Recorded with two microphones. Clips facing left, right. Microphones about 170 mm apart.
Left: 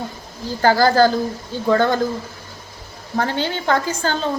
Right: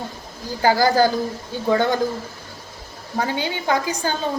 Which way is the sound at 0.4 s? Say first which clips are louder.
Left 2 dB; 15° right (ahead or behind).